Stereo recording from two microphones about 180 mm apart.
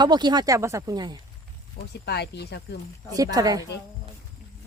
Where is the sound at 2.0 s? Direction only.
65° left (ahead or behind).